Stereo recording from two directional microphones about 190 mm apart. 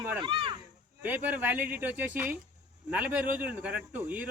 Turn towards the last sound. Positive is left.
turn(degrees=-10)  # may be behind; listen again after turning